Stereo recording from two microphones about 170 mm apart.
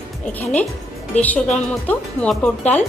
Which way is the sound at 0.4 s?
10° left (ahead or behind).